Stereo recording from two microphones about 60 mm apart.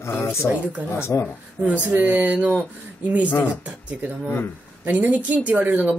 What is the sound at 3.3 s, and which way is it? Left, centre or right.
Speech, left.